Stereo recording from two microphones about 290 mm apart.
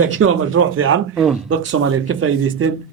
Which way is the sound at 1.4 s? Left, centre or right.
Right.